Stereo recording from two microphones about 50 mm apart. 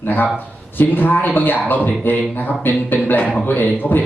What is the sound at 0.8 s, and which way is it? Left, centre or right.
A man's voice, left.